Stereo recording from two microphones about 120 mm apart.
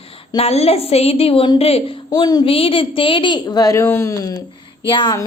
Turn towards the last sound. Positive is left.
turn(degrees=40)  # may be behind; listen again after turning